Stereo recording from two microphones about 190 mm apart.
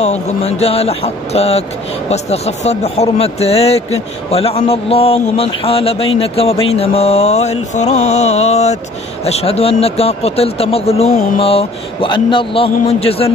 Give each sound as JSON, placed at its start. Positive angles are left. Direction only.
{"t": 0.0, "sound": "a man's voice", "side_deg": 35}